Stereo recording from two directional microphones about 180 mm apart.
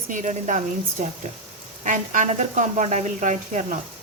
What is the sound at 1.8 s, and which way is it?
A woman's voice, 45° right (ahead or behind).